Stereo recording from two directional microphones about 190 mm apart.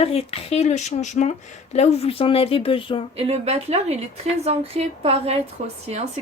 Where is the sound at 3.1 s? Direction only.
30° right (ahead or behind).